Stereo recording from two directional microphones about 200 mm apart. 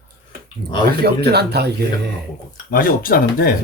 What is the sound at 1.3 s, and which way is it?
Speech, 55° right (ahead or behind).